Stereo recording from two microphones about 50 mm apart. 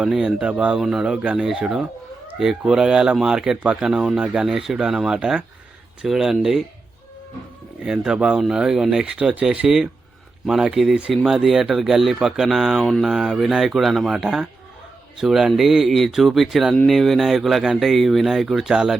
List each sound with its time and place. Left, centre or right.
0.1 s speech: centre
0.3 s speech: right
0.8 s speech: centre
7.9 s speech: centre
10.4 s speech: centre